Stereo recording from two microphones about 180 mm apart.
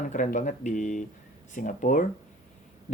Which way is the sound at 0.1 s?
45° left (ahead or behind).